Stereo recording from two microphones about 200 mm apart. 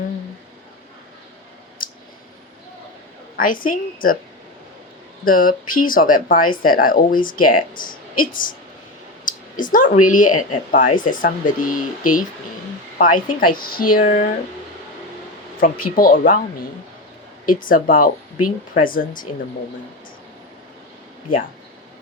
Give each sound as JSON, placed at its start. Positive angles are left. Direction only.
{"t": 1.8, "sound": "clicking", "side_deg": 45}
{"t": 3.3, "sound": "speech", "side_deg": 45}
{"t": 5.2, "sound": "speech", "side_deg": 45}
{"t": 16.0, "sound": "speech", "side_deg": 45}
{"t": 21.3, "sound": "speech", "side_deg": 45}